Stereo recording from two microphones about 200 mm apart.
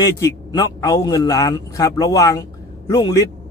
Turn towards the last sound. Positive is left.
turn(degrees=15)  # may be behind; listen again after turning